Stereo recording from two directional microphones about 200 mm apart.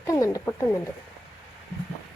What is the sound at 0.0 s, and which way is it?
Speech, 15° left (ahead or behind).